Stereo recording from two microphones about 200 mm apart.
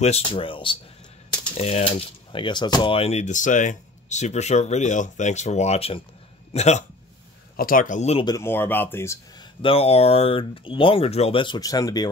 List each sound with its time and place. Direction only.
0.0 s speech: 30° left (ahead or behind)
7.5 s speech: 45° left (ahead or behind); by 8.4 s 30° left (ahead or behind)
8.4 s speech: 10° left (ahead or behind)
9.6 s speech: 30° left (ahead or behind)